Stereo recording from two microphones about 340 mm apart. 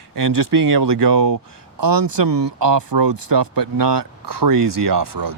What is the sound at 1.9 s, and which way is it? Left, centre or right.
Speech, right.